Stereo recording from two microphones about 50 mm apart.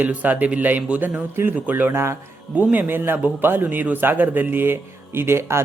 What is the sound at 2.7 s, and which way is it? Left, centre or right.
Speech, right.